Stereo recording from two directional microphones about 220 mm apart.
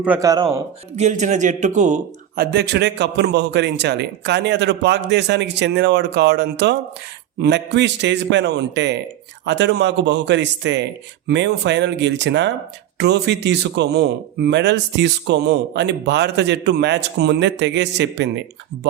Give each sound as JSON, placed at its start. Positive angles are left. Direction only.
{"t": 0.0, "sound": "a man's voice", "side_deg": -10}
{"t": 0.9, "sound": "a man's voice", "side_deg": -30}